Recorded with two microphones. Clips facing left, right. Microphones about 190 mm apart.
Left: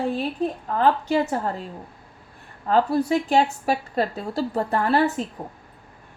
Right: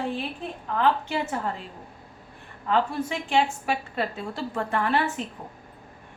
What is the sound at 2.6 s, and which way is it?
A woman's voice, 40° left (ahead or behind).